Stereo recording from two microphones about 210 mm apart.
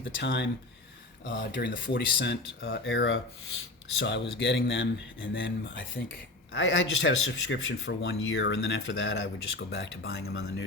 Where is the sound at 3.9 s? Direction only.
55° left (ahead or behind).